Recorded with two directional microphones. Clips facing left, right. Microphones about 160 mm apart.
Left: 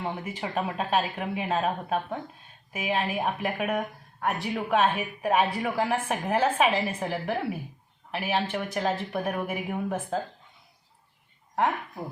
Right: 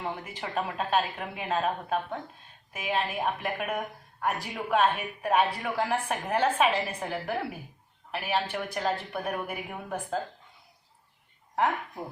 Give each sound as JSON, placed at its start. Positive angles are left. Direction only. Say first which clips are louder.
{"t": 0.0, "sound": "speech", "louder": "left 3 dB", "side_deg": 5}
{"t": 11.5, "sound": "speech", "louder": "left 1 dB", "side_deg": 0}